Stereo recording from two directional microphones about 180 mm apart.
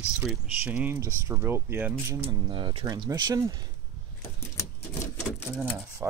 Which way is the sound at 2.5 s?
30° right (ahead or behind).